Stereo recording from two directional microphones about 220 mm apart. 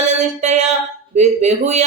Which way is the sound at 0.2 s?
30° right (ahead or behind).